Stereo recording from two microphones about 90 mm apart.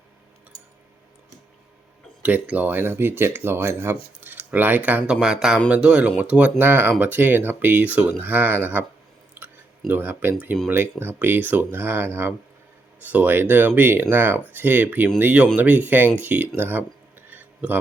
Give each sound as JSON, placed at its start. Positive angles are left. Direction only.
{"t": 2.2, "sound": "speech", "side_deg": -15}
{"t": 9.3, "sound": "chewing", "side_deg": -25}
{"t": 11.2, "sound": "speech", "side_deg": -20}
{"t": 16.6, "sound": "a sound", "side_deg": -20}